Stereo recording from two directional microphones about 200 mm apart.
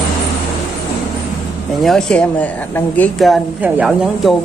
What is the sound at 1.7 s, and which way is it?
Speech, centre (ahead or behind).